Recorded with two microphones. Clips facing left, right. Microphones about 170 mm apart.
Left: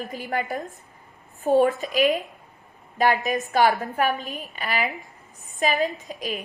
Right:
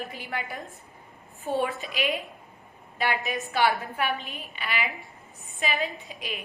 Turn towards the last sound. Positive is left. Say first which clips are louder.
# left 6 dB
turn(degrees=40)  # may be behind; listen again after turning